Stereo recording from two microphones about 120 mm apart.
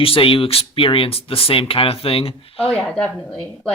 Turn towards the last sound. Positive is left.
turn(degrees=10)  # may be behind; listen again after turning